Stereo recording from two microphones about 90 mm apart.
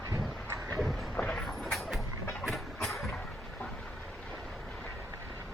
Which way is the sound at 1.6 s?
Centre (ahead or behind).